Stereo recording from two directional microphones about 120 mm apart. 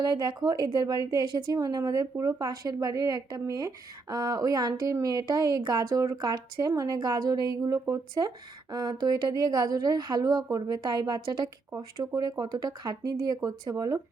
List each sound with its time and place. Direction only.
0.0 s a woman's voice: 35° right (ahead or behind)